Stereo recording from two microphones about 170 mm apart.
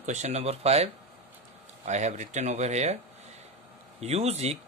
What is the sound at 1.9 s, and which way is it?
Speech, 40° right (ahead or behind).